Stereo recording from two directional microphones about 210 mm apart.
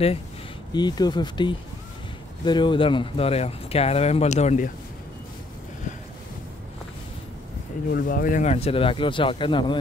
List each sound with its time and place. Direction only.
0.7 s speech: 20° left (ahead or behind)
7.9 s speech: 40° left (ahead or behind); by 9.8 s 25° left (ahead or behind)